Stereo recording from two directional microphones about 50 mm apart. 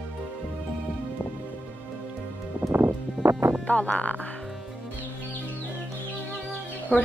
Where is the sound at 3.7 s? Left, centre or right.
Left.